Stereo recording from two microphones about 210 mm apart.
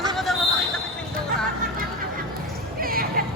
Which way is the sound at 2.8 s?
45° right (ahead or behind).